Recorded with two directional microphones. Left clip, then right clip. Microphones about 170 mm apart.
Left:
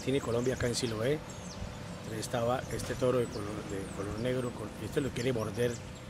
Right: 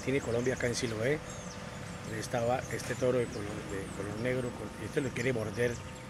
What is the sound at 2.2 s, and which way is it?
Speech, 10° left (ahead or behind).